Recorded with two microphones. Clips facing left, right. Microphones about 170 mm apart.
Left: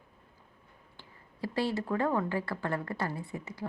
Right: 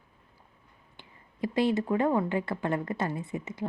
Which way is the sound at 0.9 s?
20° right (ahead or behind).